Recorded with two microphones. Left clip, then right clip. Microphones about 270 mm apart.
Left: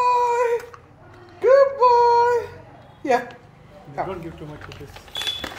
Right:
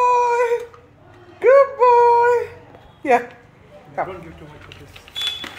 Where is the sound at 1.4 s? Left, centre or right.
Centre.